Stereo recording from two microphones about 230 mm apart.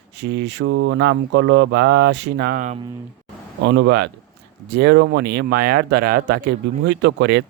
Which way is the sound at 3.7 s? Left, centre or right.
Right.